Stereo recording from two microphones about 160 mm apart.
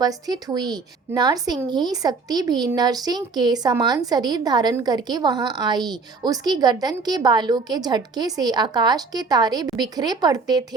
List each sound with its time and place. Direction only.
0.0 s a woman's voice: 25° right (ahead or behind)